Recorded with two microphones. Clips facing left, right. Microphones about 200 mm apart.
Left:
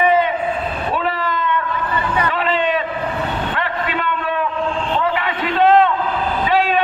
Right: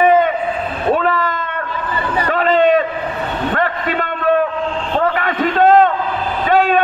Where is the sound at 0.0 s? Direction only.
45° right (ahead or behind).